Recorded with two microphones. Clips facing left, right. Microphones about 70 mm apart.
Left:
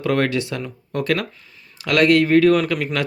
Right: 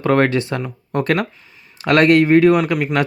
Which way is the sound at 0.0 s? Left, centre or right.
Right.